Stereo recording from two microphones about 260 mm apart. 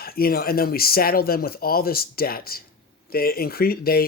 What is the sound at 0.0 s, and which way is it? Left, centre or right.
Speech, left.